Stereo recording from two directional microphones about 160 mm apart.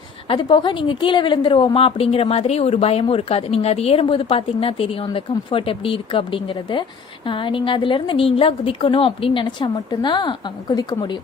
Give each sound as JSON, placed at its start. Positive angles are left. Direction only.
{"t": 0.3, "sound": "a woman's voice", "side_deg": 30}